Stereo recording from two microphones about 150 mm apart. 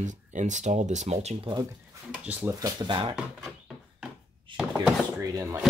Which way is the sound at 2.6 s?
30° right (ahead or behind).